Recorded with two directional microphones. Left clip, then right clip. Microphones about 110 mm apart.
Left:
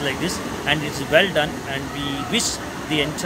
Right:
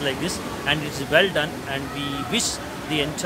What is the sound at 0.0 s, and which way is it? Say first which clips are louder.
Speech: left 2 dB; 15° right (ahead or behind).